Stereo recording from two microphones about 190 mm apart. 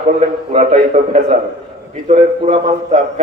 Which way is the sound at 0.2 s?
35° right (ahead or behind).